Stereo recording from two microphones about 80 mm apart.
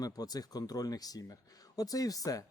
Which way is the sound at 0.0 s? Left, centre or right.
Left.